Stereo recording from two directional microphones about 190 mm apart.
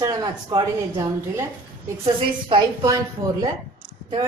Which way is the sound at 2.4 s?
20° right (ahead or behind).